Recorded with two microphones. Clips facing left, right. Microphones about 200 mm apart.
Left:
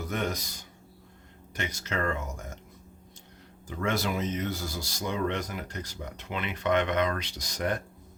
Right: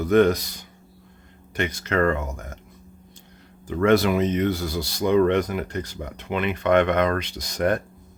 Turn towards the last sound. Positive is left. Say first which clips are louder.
# right 8 dB
turn(degrees=-55)  # may be behind; listen again after turning